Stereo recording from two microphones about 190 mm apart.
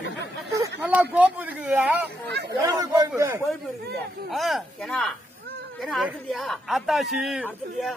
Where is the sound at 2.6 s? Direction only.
20° right (ahead or behind).